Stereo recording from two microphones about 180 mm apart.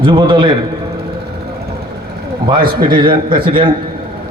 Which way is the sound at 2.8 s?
25° right (ahead or behind).